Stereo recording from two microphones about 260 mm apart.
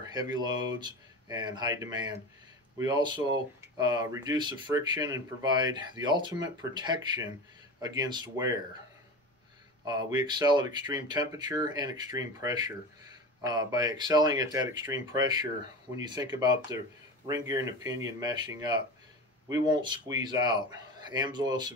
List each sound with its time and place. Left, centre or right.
0.0 s speech: centre
9.8 s speech: centre